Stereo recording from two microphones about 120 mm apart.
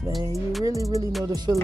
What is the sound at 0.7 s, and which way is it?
Music, 25° right (ahead or behind).